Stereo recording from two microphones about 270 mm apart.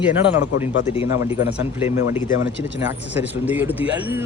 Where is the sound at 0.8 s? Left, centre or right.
Left.